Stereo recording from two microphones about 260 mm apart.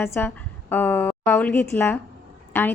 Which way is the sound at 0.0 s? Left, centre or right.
Centre.